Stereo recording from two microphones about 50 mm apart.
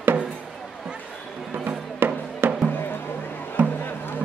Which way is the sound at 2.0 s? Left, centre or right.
Right.